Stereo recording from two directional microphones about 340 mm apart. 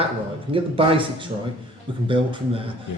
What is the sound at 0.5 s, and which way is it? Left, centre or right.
Speech, centre.